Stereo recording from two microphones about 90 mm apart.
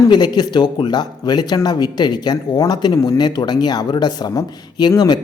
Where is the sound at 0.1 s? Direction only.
50° left (ahead or behind).